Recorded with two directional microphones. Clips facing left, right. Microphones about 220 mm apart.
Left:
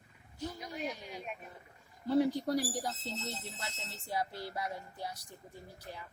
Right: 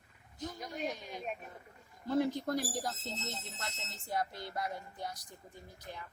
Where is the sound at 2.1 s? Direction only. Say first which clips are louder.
Left 2 dB; 10° left (ahead or behind).